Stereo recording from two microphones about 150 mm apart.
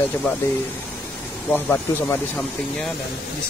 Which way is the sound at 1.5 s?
10° left (ahead or behind).